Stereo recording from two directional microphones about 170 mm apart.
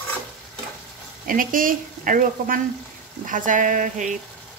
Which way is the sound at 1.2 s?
55° right (ahead or behind).